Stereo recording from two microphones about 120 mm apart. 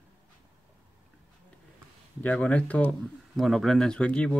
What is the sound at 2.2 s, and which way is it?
Speech, 10° left (ahead or behind).